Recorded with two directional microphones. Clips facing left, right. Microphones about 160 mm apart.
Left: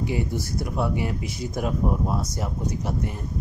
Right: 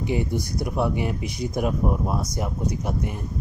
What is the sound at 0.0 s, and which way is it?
Speech, 20° right (ahead or behind).